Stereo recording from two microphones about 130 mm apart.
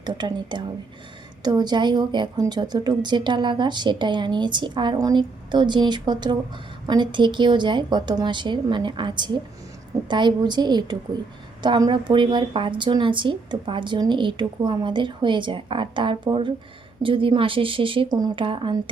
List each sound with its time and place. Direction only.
0.0 s a woman's voice: 35° right (ahead or behind)